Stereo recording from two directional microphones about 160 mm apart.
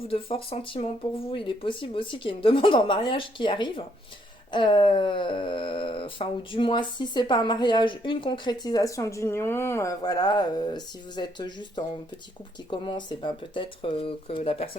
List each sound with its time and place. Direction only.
0.1 s speech: 35° left (ahead or behind)